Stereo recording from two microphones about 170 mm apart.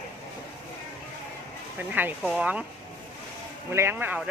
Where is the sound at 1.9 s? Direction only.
10° right (ahead or behind).